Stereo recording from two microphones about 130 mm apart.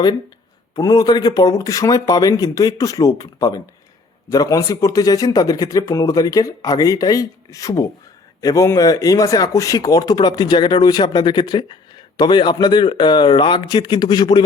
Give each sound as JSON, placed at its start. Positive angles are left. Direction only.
{"t": 0.8, "sound": "speech", "side_deg": 30}